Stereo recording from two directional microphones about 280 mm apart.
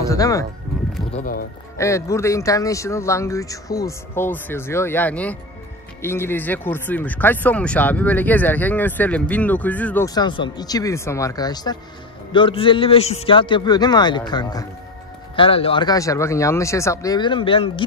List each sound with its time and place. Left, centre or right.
0.0 s speech: centre
1.1 s speech: left
1.8 s speech: centre